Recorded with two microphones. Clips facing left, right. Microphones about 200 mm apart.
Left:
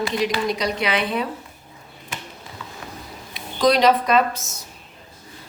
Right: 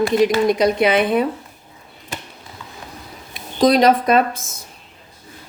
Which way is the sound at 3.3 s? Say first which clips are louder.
Right 4 dB; 50° right (ahead or behind).